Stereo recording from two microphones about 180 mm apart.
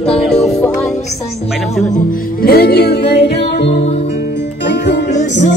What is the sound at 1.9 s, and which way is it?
Music, 50° left (ahead or behind).